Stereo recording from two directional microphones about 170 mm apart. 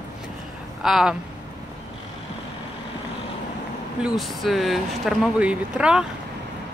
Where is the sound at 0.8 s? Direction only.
Centre (ahead or behind).